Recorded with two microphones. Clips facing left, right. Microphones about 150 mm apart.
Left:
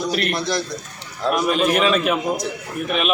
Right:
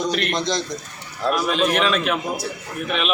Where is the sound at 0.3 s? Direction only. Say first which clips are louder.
Even; 20° right (ahead or behind).